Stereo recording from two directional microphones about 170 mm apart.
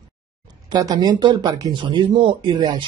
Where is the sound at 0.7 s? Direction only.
25° right (ahead or behind).